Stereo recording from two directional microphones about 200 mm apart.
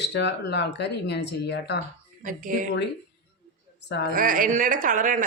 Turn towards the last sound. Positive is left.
turn(degrees=-40)  # may be behind; listen again after turning